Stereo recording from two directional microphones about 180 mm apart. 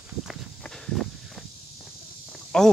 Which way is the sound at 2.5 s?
5° left (ahead or behind).